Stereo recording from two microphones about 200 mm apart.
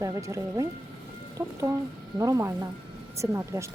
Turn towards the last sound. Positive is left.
turn(degrees=-15)  # may be behind; listen again after turning